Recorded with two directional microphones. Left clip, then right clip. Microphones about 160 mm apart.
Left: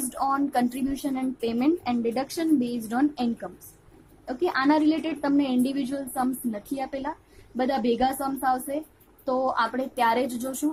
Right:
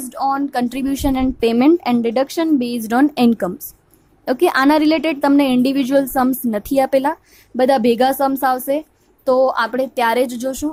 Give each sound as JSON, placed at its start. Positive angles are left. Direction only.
{"t": 0.0, "sound": "a woman's voice", "side_deg": -40}